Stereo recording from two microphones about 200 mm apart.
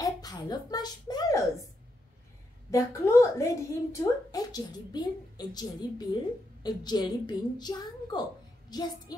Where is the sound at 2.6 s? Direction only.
15° left (ahead or behind).